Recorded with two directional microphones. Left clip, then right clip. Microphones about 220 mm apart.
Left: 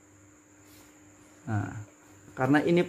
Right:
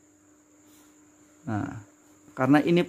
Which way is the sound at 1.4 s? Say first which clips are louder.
Right 3 dB; 40° right (ahead or behind).